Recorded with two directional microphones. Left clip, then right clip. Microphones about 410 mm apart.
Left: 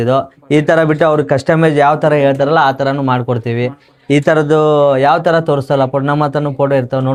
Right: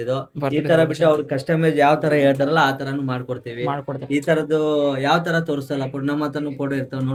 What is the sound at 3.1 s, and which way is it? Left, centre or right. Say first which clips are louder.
Speech: left 12 dB; left.